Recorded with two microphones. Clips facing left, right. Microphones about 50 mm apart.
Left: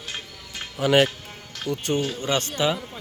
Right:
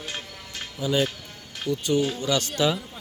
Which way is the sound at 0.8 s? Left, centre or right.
Left.